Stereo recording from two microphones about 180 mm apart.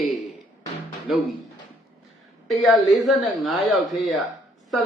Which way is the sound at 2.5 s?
Centre (ahead or behind).